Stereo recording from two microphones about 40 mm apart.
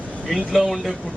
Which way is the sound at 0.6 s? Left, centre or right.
Centre.